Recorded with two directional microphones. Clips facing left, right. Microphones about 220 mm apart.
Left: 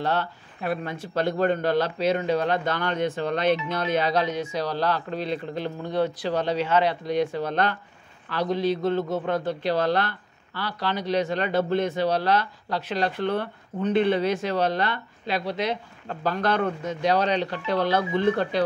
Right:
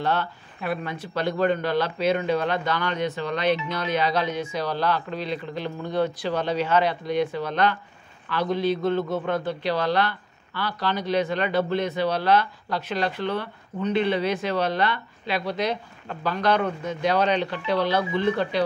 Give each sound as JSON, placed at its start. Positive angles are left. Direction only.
{"t": 0.0, "sound": "speech", "side_deg": 35}
{"t": 5.8, "sound": "speech", "side_deg": 30}
{"t": 8.3, "sound": "speech", "side_deg": 35}
{"t": 10.6, "sound": "speech", "side_deg": 30}
{"t": 13.1, "sound": "speech", "side_deg": 50}
{"t": 15.4, "sound": "speech", "side_deg": 25}
{"t": 16.2, "sound": "speech", "side_deg": 45}